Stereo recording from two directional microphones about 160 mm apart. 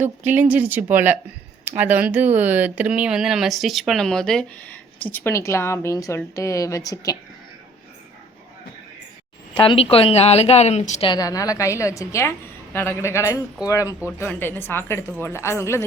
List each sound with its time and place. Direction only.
0.2 s speech: 10° right (ahead or behind); by 7.2 s 20° left (ahead or behind)
9.6 s speech: 35° left (ahead or behind)
11.1 s a woman's voice: 20° left (ahead or behind)